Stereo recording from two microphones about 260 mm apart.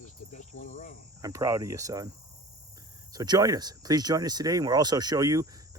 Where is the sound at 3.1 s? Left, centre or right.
Centre.